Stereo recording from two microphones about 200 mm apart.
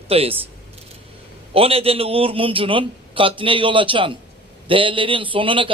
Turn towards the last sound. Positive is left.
turn(degrees=-25)  # may be behind; listen again after turning